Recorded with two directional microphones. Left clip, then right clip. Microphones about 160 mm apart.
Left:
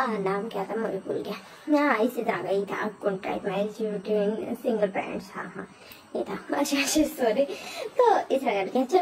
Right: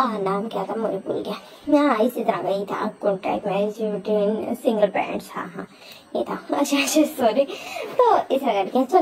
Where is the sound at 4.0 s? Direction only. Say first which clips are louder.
Right 5 dB; 15° right (ahead or behind).